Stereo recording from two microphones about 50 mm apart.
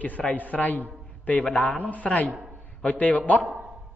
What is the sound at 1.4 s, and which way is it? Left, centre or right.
Speech, left.